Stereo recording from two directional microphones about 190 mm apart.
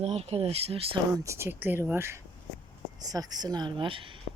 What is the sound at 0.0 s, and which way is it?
Speech, 35° right (ahead or behind).